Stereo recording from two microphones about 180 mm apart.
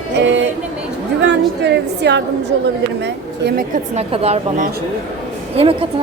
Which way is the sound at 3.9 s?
35° right (ahead or behind).